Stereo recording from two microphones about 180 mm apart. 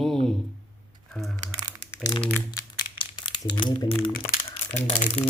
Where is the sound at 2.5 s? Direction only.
25° left (ahead or behind).